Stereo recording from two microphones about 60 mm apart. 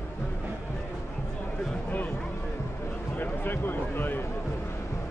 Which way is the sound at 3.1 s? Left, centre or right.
Left.